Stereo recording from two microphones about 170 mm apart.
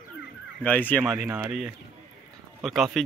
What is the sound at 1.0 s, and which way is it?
Speech, 10° right (ahead or behind).